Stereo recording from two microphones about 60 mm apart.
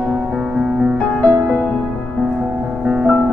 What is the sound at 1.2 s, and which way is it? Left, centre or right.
Music, centre.